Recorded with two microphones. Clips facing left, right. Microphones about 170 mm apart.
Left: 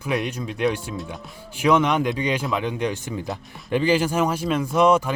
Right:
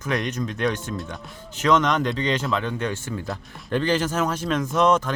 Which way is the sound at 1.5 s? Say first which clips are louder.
Left 1 dB; 10° left (ahead or behind).